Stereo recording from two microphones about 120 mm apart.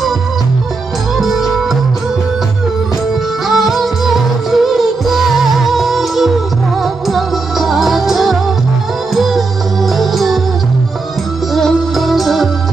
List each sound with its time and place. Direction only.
1.1 s music: centre (ahead or behind)
3.4 s music: centre (ahead or behind)
11.5 s music: centre (ahead or behind)